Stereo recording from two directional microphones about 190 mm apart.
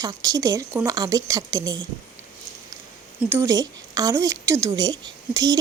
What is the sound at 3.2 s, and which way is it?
A woman's voice, 15° right (ahead or behind).